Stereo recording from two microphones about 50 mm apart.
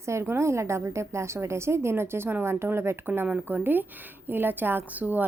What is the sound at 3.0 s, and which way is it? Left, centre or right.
Speech, right.